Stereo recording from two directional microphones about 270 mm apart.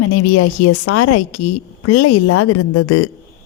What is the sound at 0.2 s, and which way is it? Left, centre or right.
A woman's voice, left.